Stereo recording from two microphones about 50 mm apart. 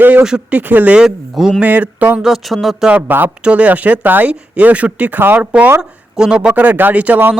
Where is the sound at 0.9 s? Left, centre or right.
Centre.